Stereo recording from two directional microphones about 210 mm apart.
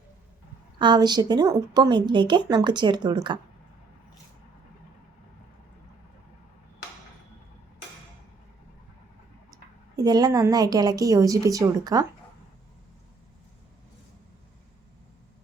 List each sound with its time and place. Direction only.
0.8 s a woman's voice: 20° right (ahead or behind)
9.9 s a woman's voice: 20° right (ahead or behind)